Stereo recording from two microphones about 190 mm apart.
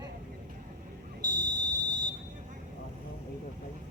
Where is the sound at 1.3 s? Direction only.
20° right (ahead or behind).